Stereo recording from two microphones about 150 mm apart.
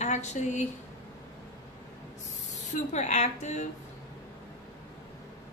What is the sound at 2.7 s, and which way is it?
Speech, 50° left (ahead or behind).